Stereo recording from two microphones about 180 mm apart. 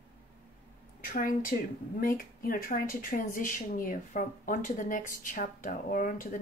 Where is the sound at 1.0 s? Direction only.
50° left (ahead or behind).